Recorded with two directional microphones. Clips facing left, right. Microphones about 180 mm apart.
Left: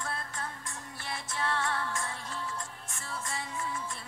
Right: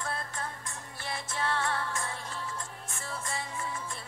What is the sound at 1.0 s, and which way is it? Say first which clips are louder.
Music: right 1 dB; 35° right (ahead or behind).